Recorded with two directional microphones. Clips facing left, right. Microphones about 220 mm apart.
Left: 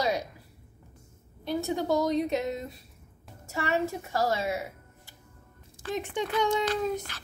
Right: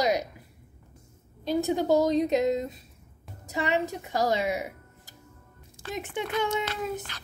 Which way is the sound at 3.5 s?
20° right (ahead or behind).